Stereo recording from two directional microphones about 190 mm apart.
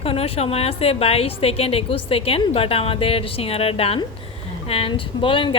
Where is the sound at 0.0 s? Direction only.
30° left (ahead or behind).